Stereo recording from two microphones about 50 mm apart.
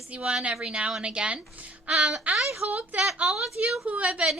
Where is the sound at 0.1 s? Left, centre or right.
Right.